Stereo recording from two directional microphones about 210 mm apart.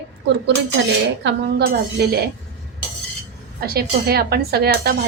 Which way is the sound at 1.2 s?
50° right (ahead or behind).